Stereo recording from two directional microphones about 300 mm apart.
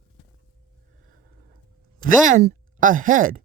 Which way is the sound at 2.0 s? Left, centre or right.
Right.